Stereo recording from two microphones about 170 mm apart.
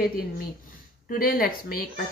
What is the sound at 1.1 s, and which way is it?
Speech, 55° left (ahead or behind).